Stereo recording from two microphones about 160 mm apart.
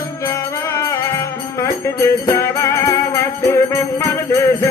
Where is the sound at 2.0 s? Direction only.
15° left (ahead or behind).